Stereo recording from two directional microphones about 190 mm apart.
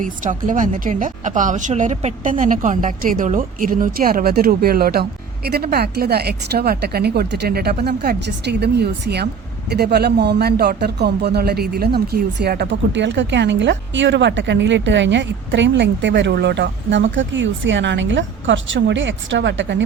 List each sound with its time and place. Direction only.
0.0 s speech: 45° right (ahead or behind); by 19.8 s 70° right (ahead or behind)